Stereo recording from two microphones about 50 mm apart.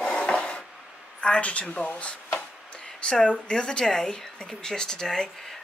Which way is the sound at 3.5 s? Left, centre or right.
Centre.